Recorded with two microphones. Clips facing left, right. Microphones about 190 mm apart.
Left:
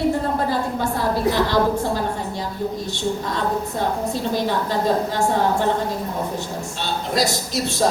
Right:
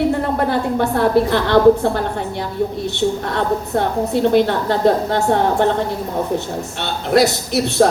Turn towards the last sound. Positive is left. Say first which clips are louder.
# right 7 dB
turn(degrees=-65)  # may be behind; listen again after turning